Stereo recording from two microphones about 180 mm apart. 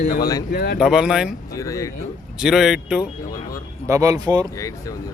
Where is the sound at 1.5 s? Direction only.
20° left (ahead or behind).